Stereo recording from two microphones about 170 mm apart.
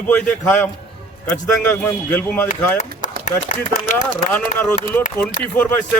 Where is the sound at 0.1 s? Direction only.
10° left (ahead or behind).